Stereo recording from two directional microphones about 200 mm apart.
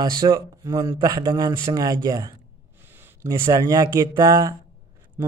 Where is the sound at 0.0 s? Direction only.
20° right (ahead or behind).